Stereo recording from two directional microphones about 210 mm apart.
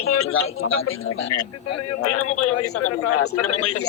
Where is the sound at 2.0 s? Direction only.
90° left.